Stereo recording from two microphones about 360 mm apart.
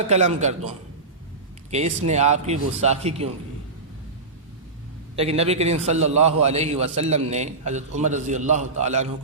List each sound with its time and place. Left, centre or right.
0.1 s a man's voice: centre
1.7 s a man's voice: centre
5.1 s a man's voice: centre